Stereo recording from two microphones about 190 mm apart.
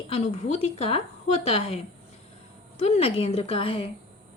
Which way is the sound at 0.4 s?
35° left (ahead or behind).